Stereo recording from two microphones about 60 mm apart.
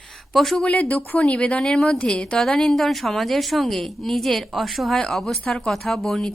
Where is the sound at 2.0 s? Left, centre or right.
Centre.